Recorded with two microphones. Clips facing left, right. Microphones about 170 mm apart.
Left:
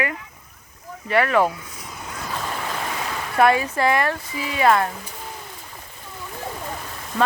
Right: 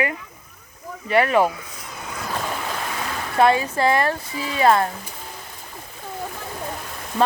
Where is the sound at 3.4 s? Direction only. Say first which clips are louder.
Even; 25° right (ahead or behind).